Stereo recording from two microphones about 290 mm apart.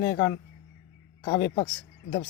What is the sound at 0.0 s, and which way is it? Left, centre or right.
Speech, centre.